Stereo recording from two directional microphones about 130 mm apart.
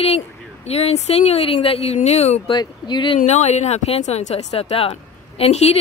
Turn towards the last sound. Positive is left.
turn(degrees=55)  # may be behind; listen again after turning